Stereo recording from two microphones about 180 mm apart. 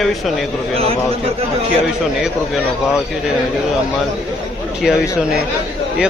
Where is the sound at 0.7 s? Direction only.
35° right (ahead or behind).